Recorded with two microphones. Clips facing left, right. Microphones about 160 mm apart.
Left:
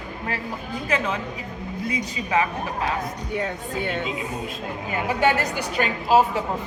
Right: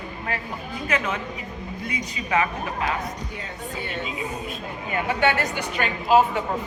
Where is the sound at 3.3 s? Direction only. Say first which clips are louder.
Left 6 dB; 60° left (ahead or behind).